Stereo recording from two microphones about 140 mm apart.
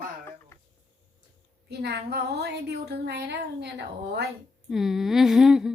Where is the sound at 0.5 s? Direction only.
15° left (ahead or behind).